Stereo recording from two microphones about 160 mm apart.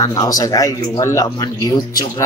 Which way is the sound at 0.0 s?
20° left (ahead or behind).